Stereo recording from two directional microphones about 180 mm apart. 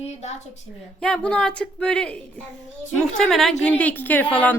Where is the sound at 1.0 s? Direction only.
5° left (ahead or behind).